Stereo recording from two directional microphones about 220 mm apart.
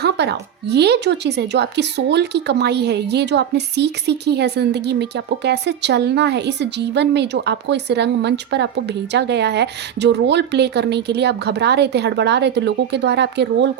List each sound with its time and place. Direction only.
0.0 s speech: 50° right (ahead or behind)